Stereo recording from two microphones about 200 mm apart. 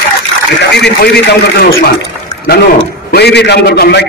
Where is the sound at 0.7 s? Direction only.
55° left (ahead or behind).